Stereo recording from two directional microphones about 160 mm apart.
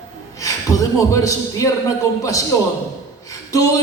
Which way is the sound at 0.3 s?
20° left (ahead or behind).